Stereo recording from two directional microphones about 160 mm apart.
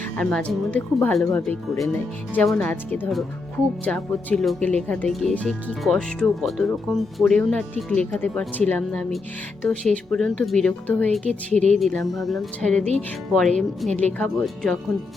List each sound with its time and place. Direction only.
0.2 s speech: 5° left (ahead or behind)
11.3 s speech: 45° right (ahead or behind)
11.8 s speech: centre (ahead or behind)